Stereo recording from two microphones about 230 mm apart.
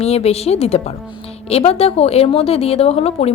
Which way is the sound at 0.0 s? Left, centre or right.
Left.